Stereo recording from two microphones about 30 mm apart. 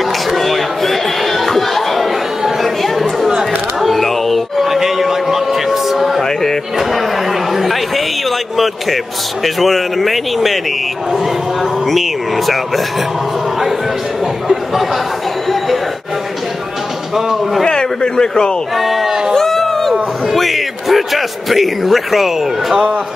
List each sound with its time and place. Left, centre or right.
0.4 s chatter: centre
3.3 s a sound: centre
4.6 s a sound: centre
6.2 s a sound: centre
6.8 s chatter: centre
8.5 s a man's voice: centre
11.8 s a man's voice: centre
17.6 s speech: left
18.8 s a man's voice: centre
19.0 s speech: centre
19.3 s a sound: centre
20.3 s a man's voice: centre